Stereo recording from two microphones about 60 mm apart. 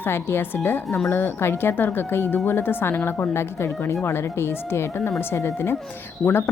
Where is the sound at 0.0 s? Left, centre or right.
Left.